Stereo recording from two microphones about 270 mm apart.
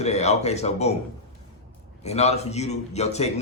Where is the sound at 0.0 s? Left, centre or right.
Left.